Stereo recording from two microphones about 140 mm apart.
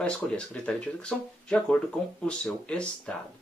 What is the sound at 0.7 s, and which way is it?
Speech, 5° left (ahead or behind).